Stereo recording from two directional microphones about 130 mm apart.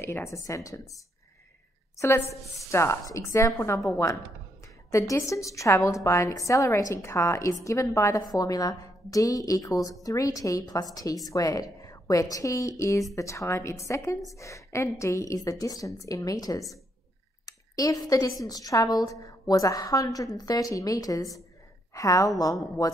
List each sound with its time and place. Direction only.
0.0 s a woman's voice: 20° left (ahead or behind)
4.9 s a woman's voice: 25° left (ahead or behind)
17.5 s a sound: 25° left (ahead or behind)
18.4 s a woman's voice: 25° left (ahead or behind)